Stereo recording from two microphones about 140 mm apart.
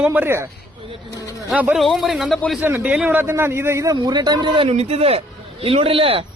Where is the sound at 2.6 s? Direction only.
15° right (ahead or behind).